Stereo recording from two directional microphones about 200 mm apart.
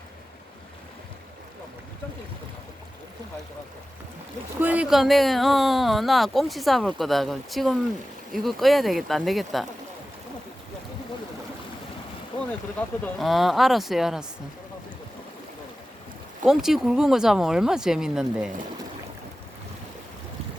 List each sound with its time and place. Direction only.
4.6 s speech: 5° right (ahead or behind)
12.3 s boat: 25° left (ahead or behind)
12.8 s speech: 5° left (ahead or behind)
16.5 s speech: centre (ahead or behind)